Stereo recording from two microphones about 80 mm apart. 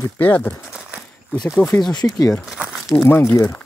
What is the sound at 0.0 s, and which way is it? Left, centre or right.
Speech, left.